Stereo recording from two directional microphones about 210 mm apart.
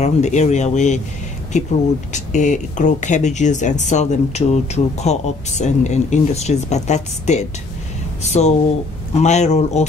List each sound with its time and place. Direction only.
0.0 s speech: 35° left (ahead or behind)